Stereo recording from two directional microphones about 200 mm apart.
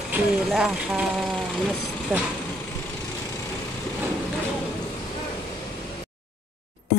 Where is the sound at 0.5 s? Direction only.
Centre (ahead or behind).